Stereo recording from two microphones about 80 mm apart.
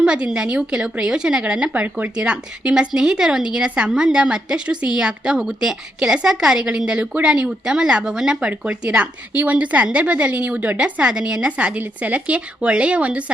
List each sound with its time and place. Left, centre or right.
0.0 s a woman's voice: centre